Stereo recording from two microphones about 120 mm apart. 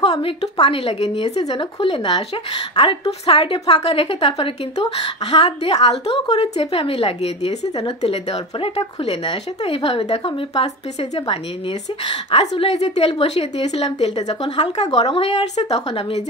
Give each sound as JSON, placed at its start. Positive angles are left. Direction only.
{"t": 0.2, "sound": "a woman's voice", "side_deg": 55}
{"t": 1.5, "sound": "a woman's voice", "side_deg": 50}